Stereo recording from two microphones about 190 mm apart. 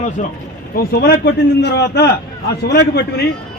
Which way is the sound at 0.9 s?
60° left (ahead or behind).